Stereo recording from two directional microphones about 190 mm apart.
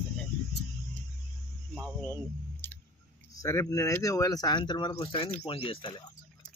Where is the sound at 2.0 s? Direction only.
10° left (ahead or behind).